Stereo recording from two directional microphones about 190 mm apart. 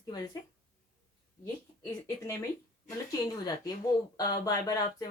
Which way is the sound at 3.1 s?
20° left (ahead or behind).